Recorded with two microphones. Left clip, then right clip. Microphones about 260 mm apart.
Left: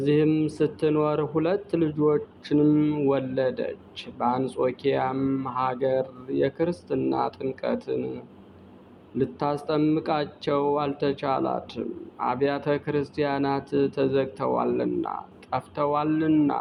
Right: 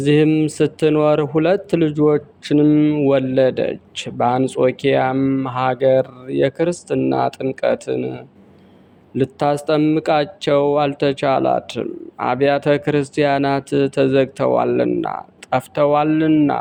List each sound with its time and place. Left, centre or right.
0.0 s speech: right